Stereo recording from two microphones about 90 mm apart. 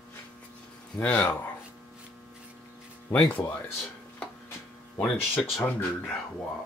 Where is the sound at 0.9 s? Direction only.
15° left (ahead or behind).